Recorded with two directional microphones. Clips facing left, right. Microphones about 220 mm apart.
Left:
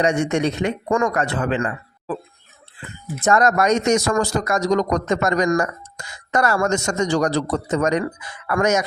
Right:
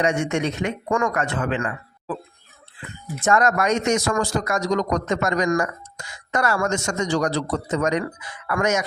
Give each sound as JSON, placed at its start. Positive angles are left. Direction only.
{"t": 0.0, "sound": "speech", "side_deg": 35}
{"t": 3.2, "sound": "speech", "side_deg": 40}